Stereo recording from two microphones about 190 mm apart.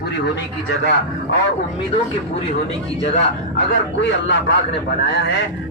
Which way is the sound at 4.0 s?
70° left (ahead or behind).